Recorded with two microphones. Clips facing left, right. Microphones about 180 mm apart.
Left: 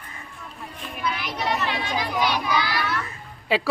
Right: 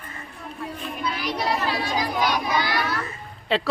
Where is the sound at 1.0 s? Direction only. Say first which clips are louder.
Right 1 dB; 35° right (ahead or behind).